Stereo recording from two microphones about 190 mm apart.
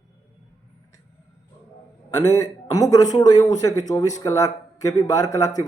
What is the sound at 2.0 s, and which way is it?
Speech, 20° left (ahead or behind).